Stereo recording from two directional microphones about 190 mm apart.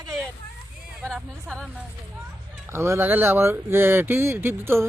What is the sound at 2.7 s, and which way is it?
Speech, 15° right (ahead or behind).